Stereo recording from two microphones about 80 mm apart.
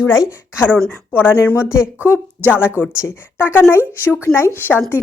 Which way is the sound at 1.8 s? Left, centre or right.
Right.